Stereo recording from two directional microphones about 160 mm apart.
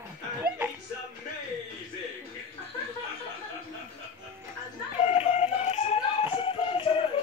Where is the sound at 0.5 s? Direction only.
70° right (ahead or behind).